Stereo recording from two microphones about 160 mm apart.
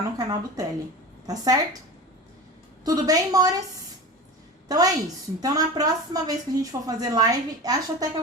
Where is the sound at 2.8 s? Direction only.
25° right (ahead or behind).